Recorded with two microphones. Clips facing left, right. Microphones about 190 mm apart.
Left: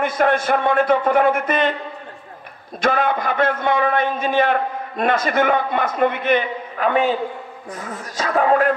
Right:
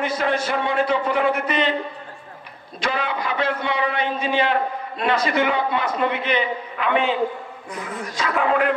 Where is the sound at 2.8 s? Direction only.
50° left (ahead or behind).